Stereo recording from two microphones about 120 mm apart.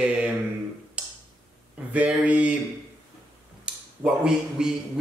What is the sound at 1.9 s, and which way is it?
Speech, 10° right (ahead or behind).